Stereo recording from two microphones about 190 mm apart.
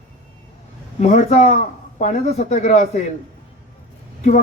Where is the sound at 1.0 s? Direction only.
35° left (ahead or behind).